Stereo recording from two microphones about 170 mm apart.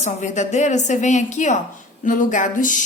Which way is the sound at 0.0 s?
45° left (ahead or behind).